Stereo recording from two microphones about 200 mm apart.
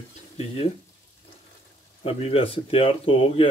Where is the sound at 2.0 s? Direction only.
30° left (ahead or behind).